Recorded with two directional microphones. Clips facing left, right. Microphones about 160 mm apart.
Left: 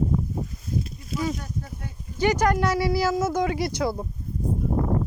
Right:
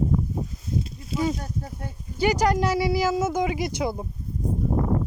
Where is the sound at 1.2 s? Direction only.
30° right (ahead or behind).